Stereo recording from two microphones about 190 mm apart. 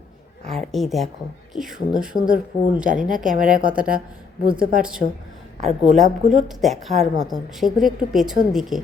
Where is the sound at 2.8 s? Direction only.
45° right (ahead or behind).